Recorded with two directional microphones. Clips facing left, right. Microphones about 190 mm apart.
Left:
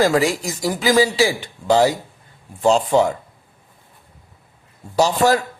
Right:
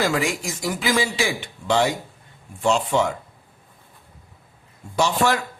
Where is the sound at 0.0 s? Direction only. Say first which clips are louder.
Left 6 dB; 35° left (ahead or behind).